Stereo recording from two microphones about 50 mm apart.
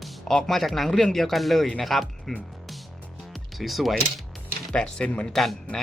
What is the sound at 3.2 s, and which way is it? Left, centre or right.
Music, centre.